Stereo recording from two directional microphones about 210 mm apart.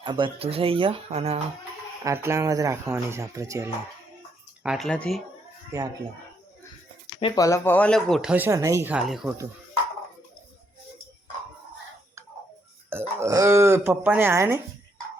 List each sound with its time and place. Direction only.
0.0 s speech: 25° right (ahead or behind)
2.0 s speech: 10° right (ahead or behind)
4.6 s speech: centre (ahead or behind)
7.2 s speech: 20° left (ahead or behind); by 9.3 s 5° right (ahead or behind)
12.9 s speech: 10° right (ahead or behind)